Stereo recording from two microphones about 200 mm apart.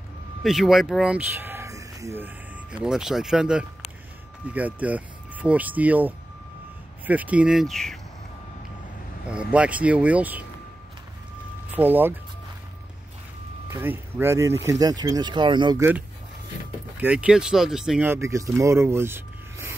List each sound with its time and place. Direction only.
0.4 s speech: centre (ahead or behind)
9.3 s speech: 5° right (ahead or behind)
11.7 s speech: 10° right (ahead or behind)
13.7 s speech: 10° right (ahead or behind)
16.9 s speech: 5° right (ahead or behind)